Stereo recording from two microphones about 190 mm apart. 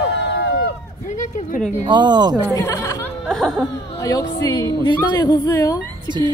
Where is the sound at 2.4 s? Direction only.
15° left (ahead or behind).